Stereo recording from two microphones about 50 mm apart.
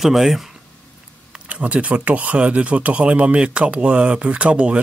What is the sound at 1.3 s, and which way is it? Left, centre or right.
Speech, right.